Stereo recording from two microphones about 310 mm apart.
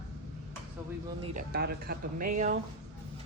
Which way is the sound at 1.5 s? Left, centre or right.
Right.